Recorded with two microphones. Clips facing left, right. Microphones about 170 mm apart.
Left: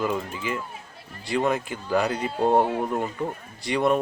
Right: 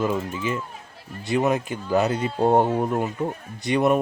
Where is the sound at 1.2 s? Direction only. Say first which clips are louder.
Right 2 dB; 20° right (ahead or behind).